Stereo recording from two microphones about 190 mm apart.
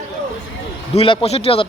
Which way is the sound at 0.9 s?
30° left (ahead or behind).